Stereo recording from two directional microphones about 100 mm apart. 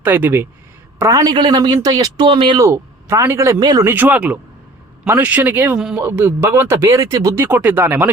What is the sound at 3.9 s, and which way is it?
Speech, 15° right (ahead or behind).